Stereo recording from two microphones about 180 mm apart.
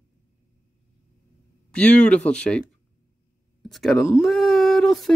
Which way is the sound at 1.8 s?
5° left (ahead or behind).